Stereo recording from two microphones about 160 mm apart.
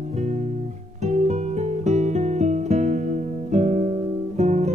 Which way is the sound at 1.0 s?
45° right (ahead or behind).